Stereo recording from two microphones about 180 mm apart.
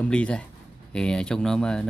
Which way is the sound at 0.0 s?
5° left (ahead or behind).